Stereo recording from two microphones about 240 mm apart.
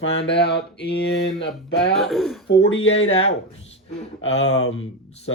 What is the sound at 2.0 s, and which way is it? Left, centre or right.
Speech, centre.